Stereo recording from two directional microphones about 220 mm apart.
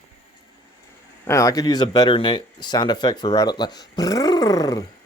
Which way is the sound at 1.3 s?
15° left (ahead or behind).